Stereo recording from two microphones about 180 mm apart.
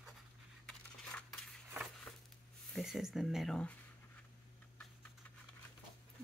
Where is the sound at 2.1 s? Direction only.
15° left (ahead or behind).